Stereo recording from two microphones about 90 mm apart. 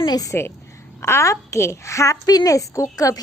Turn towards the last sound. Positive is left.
turn(degrees=40)  # may be behind; listen again after turning